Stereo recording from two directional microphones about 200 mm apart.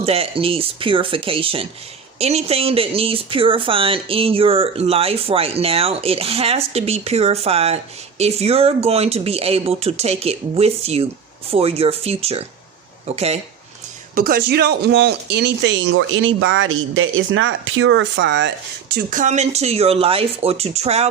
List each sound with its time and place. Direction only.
0.0 s speech: 30° right (ahead or behind)
14.2 s speech: 45° right (ahead or behind)
19.2 s speech: 35° right (ahead or behind)